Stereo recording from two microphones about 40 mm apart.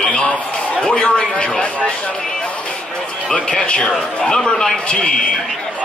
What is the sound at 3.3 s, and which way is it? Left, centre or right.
Speech, left.